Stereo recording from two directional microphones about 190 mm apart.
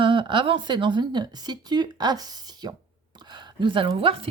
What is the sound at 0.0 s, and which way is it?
Speech, 25° right (ahead or behind).